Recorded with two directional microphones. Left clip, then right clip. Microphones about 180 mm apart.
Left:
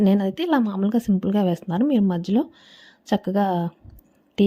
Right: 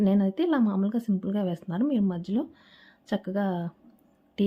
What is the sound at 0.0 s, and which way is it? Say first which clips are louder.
A woman's voice: left 4 dB; 40° left (ahead or behind).